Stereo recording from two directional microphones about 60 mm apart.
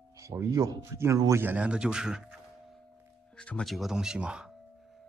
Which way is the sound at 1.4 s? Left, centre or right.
Right.